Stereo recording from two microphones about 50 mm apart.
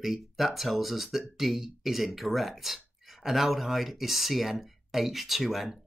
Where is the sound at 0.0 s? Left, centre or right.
Centre.